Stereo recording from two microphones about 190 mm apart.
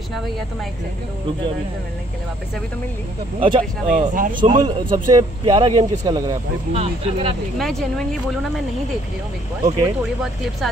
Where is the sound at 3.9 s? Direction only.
45° right (ahead or behind).